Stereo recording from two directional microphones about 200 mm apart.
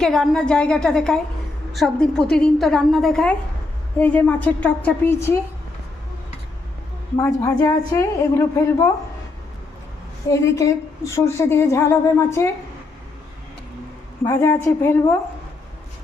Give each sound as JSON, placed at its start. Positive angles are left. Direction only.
{"t": 0.0, "sound": "a woman's voice", "side_deg": 0}
{"t": 7.2, "sound": "a woman's voice", "side_deg": 15}
{"t": 10.2, "sound": "a woman's voice", "side_deg": 15}
{"t": 14.3, "sound": "a woman's voice", "side_deg": 15}